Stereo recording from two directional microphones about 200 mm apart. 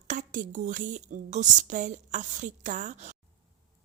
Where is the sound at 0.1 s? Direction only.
40° right (ahead or behind).